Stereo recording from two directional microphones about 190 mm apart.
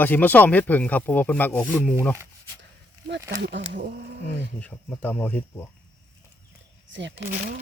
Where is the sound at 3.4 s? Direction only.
65° right (ahead or behind).